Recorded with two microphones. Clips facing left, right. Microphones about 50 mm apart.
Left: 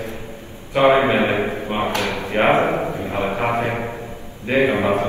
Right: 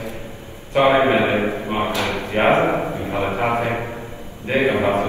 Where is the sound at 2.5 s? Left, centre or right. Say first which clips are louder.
Right 1 dB; right.